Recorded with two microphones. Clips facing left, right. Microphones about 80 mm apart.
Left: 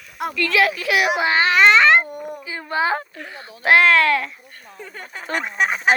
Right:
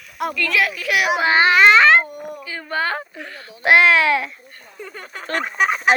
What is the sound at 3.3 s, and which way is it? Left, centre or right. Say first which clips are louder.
Speech: even; left.